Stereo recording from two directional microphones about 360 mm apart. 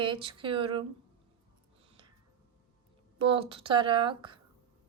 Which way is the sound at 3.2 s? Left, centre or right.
Centre.